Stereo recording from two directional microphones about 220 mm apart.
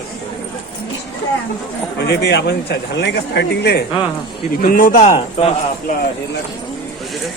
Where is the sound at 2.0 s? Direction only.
50° left (ahead or behind); by 5.5 s 25° left (ahead or behind).